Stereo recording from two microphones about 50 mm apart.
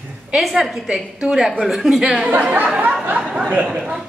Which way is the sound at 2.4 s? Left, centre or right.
Right.